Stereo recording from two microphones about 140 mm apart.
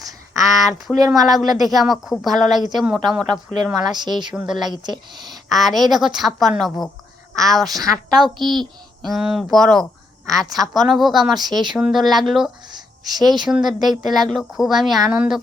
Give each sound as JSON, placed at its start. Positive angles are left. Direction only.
{"t": 0.6, "sound": "speech", "side_deg": 0}
{"t": 3.9, "sound": "speech", "side_deg": -30}
{"t": 4.4, "sound": "speech", "side_deg": -5}
{"t": 4.7, "sound": "speech", "side_deg": -30}
{"t": 5.2, "sound": "a woman's voice", "side_deg": 0}
{"t": 8.4, "sound": "speech", "side_deg": -30}
{"t": 9.0, "sound": "speech", "side_deg": 0}
{"t": 11.3, "sound": "speech", "side_deg": -30}
{"t": 11.7, "sound": "speech", "side_deg": -5}
{"t": 12.7, "sound": "a sound", "side_deg": -30}
{"t": 13.5, "sound": "speech", "side_deg": 0}